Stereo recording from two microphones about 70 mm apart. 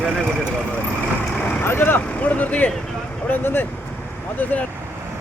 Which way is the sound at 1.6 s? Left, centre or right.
Left.